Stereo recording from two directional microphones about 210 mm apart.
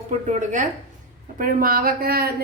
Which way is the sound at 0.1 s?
35° right (ahead or behind).